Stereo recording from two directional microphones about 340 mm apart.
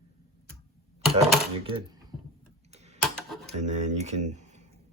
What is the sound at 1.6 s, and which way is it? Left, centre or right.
Speech, centre.